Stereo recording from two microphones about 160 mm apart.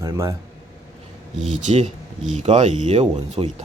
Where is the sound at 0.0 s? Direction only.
20° right (ahead or behind).